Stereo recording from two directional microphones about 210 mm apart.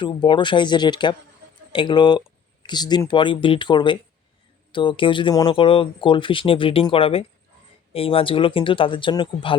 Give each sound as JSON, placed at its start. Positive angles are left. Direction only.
{"t": 0.0, "sound": "speech", "side_deg": 20}